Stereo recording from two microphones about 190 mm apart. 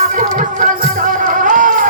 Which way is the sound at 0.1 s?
45° right (ahead or behind).